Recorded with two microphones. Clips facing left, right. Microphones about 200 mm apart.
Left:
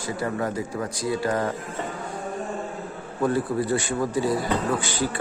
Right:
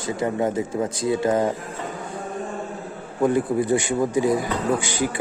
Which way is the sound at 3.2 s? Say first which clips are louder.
Right 3 dB; 15° right (ahead or behind).